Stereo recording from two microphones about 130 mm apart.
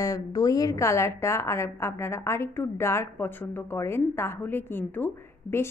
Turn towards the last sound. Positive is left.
turn(degrees=15)  # may be behind; listen again after turning